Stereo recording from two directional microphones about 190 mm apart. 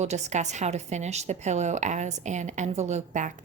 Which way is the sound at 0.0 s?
35° right (ahead or behind).